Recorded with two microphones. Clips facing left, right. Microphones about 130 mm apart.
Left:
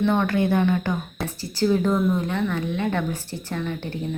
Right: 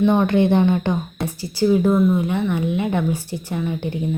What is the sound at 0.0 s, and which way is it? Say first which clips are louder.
Speech: right 5 dB; 15° right (ahead or behind).